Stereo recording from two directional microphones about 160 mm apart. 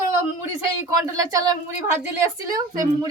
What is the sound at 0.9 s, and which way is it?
Speech, 20° right (ahead or behind).